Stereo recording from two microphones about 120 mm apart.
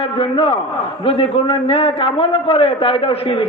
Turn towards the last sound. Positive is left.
turn(degrees=50)  # may be behind; listen again after turning